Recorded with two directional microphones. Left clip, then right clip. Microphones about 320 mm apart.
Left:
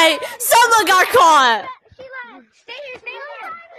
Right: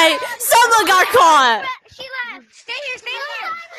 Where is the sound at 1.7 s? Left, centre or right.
Right.